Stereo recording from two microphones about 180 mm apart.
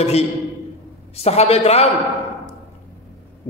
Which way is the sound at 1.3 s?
35° left (ahead or behind).